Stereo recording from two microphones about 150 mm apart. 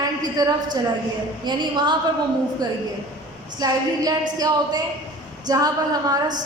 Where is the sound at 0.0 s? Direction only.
25° right (ahead or behind).